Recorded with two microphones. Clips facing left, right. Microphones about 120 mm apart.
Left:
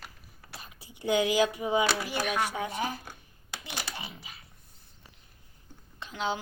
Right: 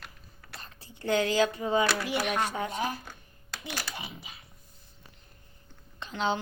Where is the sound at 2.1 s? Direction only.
Centre (ahead or behind).